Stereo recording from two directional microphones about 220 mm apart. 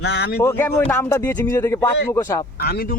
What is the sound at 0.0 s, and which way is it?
Speech, 50° left (ahead or behind).